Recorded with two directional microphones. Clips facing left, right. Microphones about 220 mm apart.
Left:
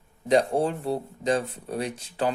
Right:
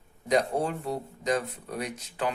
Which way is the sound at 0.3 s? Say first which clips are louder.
Left 4 dB; 30° left (ahead or behind).